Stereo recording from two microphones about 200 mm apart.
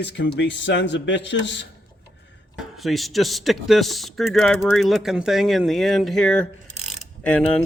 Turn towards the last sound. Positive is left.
turn(degrees=5)  # may be behind; listen again after turning